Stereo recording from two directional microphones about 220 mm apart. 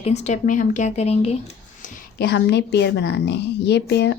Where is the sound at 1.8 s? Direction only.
45° left (ahead or behind).